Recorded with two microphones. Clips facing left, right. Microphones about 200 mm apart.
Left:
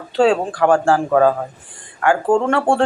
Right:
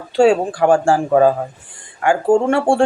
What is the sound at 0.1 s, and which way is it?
Speech, 10° right (ahead or behind).